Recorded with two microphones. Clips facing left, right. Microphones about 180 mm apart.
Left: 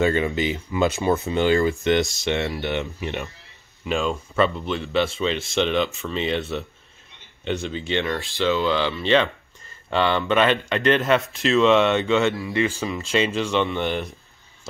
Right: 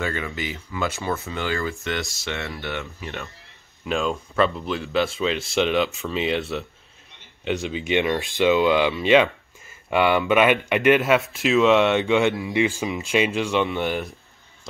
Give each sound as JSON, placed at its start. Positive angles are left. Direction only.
{"t": 0.0, "sound": "speech", "side_deg": 20}
{"t": 3.8, "sound": "speech", "side_deg": 0}
{"t": 7.8, "sound": "speech", "side_deg": -15}